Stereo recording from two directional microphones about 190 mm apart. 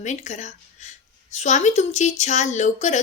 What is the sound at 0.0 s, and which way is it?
Speech, 40° left (ahead or behind).